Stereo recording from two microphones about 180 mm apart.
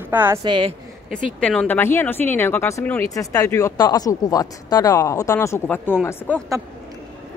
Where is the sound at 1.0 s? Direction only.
5° left (ahead or behind).